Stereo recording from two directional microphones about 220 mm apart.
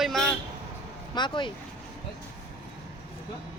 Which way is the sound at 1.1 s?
20° left (ahead or behind).